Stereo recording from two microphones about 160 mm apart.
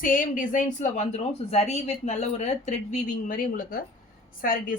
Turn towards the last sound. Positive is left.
turn(degrees=60)  # may be behind; listen again after turning